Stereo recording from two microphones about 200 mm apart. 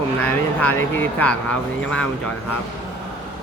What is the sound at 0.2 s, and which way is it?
Speech, 10° left (ahead or behind).